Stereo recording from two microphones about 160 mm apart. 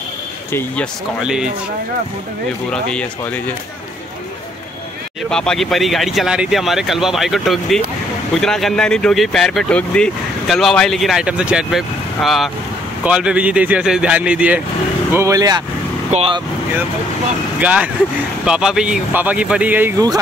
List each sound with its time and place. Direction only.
0.5 s speech: 15° left (ahead or behind)
1.2 s speech: 5° right (ahead or behind)
2.7 s speech: 5° left (ahead or behind)
5.3 s speech: 5° left (ahead or behind)
15.1 s speech: 20° right (ahead or behind)
16.1 s speech: 40° right (ahead or behind)
17.6 s speech: 10° right (ahead or behind)